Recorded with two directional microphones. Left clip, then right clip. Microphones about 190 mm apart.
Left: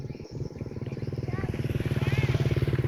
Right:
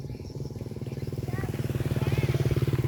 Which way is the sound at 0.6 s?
30° right (ahead or behind).